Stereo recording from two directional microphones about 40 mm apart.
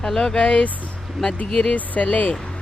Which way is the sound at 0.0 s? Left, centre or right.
Centre.